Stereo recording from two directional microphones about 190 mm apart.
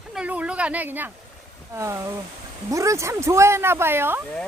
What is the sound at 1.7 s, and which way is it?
Speech, 15° right (ahead or behind).